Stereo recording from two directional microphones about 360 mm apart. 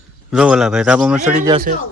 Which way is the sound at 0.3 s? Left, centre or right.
Centre.